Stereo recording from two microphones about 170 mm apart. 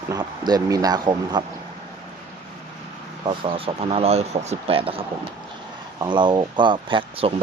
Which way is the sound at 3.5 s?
35° right (ahead or behind).